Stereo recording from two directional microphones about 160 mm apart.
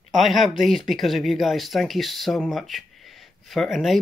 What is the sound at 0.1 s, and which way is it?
Speech, centre (ahead or behind).